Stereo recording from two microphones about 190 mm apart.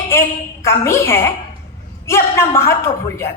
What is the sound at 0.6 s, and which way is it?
A woman's voice, 15° left (ahead or behind).